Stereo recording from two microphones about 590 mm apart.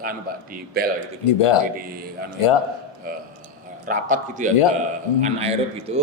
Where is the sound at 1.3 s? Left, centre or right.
Left.